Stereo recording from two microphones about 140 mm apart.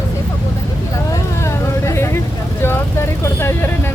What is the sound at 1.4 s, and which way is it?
Vehicle, 20° left (ahead or behind).